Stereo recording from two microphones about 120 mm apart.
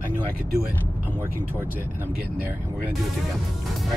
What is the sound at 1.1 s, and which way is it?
Speech, 15° left (ahead or behind).